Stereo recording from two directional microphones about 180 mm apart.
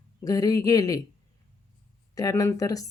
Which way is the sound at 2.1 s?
20° left (ahead or behind).